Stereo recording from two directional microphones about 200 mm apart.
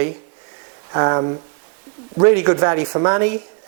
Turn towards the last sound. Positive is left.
turn(degrees=-10)  # may be behind; listen again after turning